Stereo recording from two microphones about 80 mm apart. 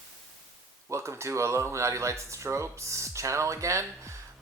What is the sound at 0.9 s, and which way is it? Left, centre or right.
Speech, right.